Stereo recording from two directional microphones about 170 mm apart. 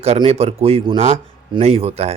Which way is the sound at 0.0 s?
35° right (ahead or behind).